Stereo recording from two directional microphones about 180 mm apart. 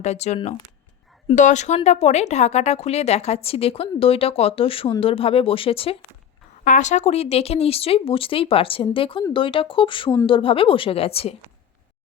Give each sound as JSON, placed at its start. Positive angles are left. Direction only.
{"t": 0.0, "sound": "speech", "side_deg": 40}
{"t": 1.4, "sound": "speech", "side_deg": 40}
{"t": 6.7, "sound": "speech", "side_deg": 40}